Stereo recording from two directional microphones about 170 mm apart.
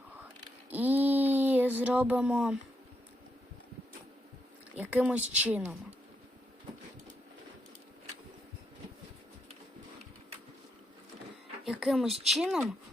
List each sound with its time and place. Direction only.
0.7 s a sound: 10° right (ahead or behind)
4.8 s speech: 10° right (ahead or behind)
11.6 s speech: centre (ahead or behind)